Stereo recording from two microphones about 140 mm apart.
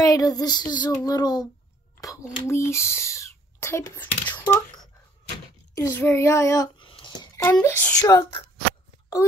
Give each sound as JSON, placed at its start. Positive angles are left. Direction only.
{"t": 0.0, "sound": "child singing", "side_deg": 25}
{"t": 2.0, "sound": "a child's voice", "side_deg": 25}
{"t": 5.8, "sound": "child singing", "side_deg": 20}
{"t": 6.8, "sound": "a sound", "side_deg": 35}
{"t": 7.6, "sound": "child singing", "side_deg": 15}